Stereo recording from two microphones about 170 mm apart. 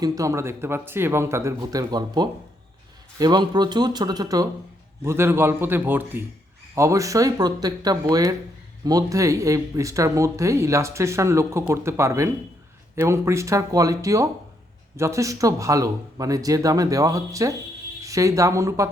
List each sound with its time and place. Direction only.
0.0 s speech: 20° right (ahead or behind)